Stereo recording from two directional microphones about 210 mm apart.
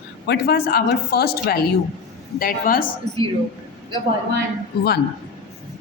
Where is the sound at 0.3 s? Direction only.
45° left (ahead or behind).